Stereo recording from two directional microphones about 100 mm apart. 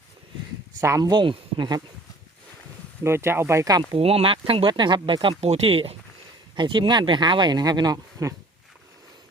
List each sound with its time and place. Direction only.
0.8 s speech: 25° right (ahead or behind)
1.0 s speech: 50° right (ahead or behind)
3.0 s speech: 25° right (ahead or behind)
3.6 s speech: 40° right (ahead or behind)
3.9 s speech: 70° right (ahead or behind)
4.6 s speech: 50° right (ahead or behind); by 6.0 s 70° right (ahead or behind)
6.6 s speech: 50° right (ahead or behind); by 8.4 s 35° right (ahead or behind)